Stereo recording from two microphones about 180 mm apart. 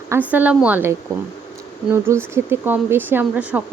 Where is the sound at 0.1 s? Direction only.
10° right (ahead or behind).